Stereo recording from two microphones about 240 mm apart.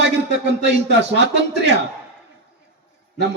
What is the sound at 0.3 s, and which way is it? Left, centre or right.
A man's voice, right.